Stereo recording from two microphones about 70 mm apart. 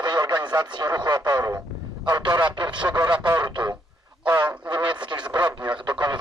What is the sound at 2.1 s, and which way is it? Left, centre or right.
Speech, right.